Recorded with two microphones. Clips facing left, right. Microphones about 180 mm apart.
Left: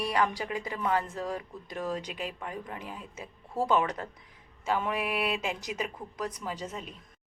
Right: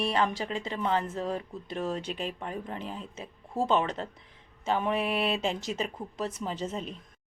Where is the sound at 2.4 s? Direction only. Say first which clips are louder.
Right 3 dB; 30° right (ahead or behind).